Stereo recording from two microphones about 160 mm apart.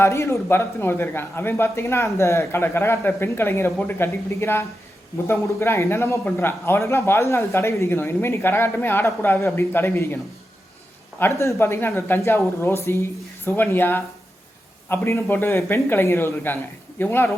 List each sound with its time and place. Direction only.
0.0 s a man's voice: 15° left (ahead or behind)
11.2 s a man's voice: 20° left (ahead or behind)